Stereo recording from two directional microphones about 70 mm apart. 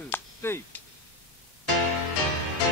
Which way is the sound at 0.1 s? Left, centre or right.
Left.